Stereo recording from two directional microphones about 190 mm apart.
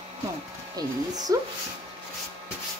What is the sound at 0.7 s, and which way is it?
Speech, 20° right (ahead or behind).